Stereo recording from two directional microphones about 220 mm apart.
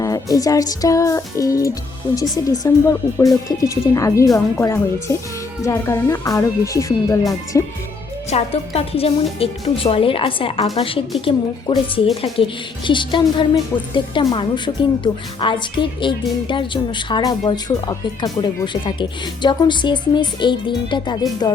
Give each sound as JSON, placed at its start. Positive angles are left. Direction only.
{"t": 0.0, "sound": "speech", "side_deg": 15}
{"t": 8.3, "sound": "a woman's voice", "side_deg": 30}